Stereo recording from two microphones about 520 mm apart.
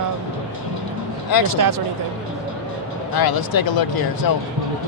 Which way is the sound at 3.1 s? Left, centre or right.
Left.